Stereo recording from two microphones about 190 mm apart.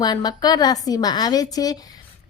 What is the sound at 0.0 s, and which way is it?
A woman's voice, 20° left (ahead or behind).